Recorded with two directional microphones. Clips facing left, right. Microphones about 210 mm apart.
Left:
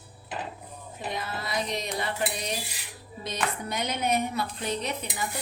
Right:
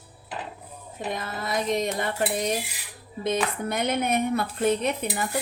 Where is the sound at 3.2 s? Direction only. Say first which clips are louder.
Right 6 dB; 55° right (ahead or behind).